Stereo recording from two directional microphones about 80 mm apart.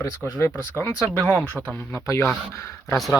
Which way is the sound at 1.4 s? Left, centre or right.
Centre.